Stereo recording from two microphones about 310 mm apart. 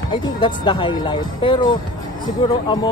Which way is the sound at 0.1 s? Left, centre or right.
Centre.